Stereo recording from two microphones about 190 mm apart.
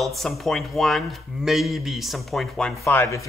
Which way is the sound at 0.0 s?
Centre (ahead or behind).